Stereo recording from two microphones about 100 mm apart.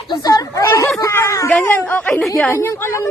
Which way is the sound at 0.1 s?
40° left (ahead or behind).